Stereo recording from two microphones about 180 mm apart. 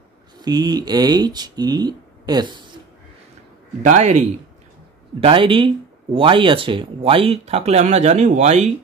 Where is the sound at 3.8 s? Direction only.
40° right (ahead or behind).